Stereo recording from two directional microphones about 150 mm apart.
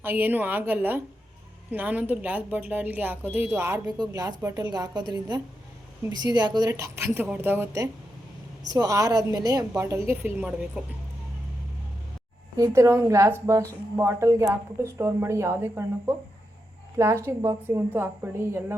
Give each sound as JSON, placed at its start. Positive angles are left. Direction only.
{"t": 0.0, "sound": "a woman's voice", "side_deg": -15}
{"t": 12.5, "sound": "a woman's voice", "side_deg": -20}
{"t": 17.2, "sound": "speech", "side_deg": -15}